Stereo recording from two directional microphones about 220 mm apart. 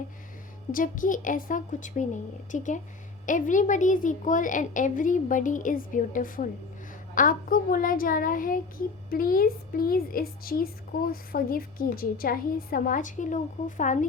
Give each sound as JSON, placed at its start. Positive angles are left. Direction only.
{"t": 0.7, "sound": "a woman's voice", "side_deg": 40}